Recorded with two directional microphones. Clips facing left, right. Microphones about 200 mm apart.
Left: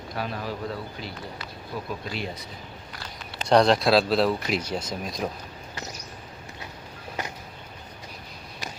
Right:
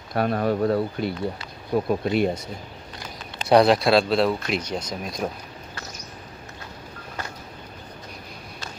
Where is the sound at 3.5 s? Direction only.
5° right (ahead or behind).